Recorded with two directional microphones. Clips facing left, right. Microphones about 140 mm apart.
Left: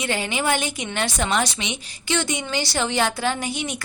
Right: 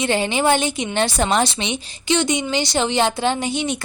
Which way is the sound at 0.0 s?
30° right (ahead or behind).